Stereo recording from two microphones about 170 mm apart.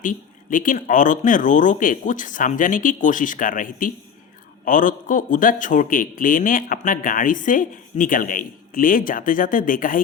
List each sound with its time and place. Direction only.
0.0 s a man's voice: 50° left (ahead or behind)